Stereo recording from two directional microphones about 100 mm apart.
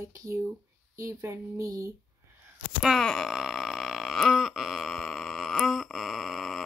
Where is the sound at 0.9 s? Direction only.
30° right (ahead or behind).